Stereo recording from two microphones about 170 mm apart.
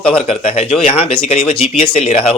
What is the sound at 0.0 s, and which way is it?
Speech, 35° left (ahead or behind).